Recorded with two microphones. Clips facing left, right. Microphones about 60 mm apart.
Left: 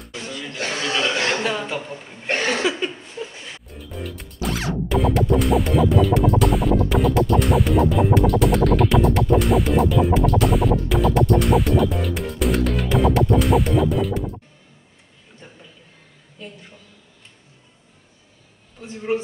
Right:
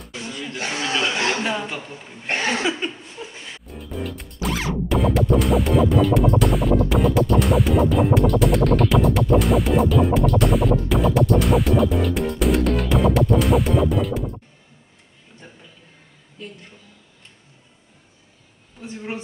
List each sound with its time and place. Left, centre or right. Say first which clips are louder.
0.3 s a sound: left 1 dB; centre
1.4 s speech: left 1 dB; centre
1.7 s a woman's voice: left 4 dB; centre
2.3 s chuckle: left 1 dB; centre
3.7 s music: right 4 dB; centre